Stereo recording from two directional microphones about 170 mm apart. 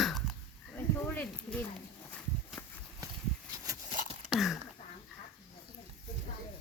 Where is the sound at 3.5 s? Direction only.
20° right (ahead or behind).